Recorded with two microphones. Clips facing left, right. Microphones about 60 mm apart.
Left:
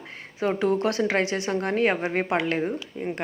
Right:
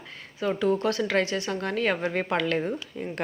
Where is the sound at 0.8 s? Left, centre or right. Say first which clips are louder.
Left 1 dB; left.